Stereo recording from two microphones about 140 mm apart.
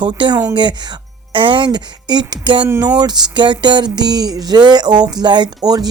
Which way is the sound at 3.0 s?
30° right (ahead or behind).